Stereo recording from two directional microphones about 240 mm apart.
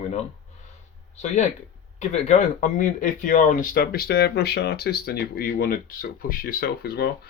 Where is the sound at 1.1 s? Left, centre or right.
Left.